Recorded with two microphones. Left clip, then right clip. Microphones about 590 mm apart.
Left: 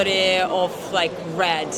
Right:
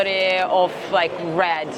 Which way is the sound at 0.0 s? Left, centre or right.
Right.